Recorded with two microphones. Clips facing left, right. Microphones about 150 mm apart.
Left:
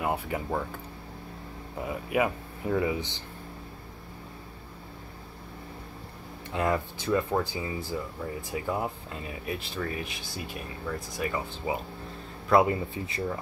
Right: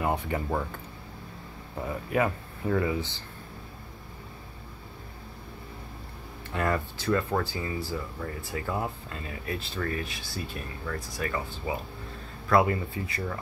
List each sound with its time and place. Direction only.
0.0 s speech: 5° left (ahead or behind)
1.8 s speech: 10° left (ahead or behind)
6.5 s speech: 15° left (ahead or behind)